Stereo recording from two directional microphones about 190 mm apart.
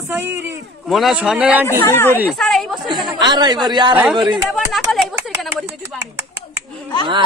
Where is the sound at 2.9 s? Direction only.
20° right (ahead or behind).